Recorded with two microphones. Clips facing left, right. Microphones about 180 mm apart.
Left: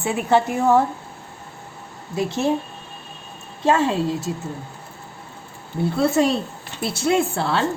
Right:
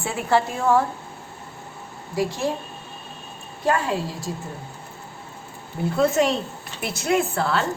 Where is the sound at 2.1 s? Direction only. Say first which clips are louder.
Left 2 dB; 25° left (ahead or behind).